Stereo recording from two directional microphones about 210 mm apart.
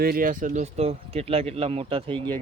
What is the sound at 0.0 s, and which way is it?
Speech, 45° right (ahead or behind).